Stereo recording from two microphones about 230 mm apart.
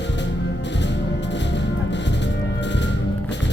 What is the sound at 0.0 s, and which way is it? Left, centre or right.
Music, left.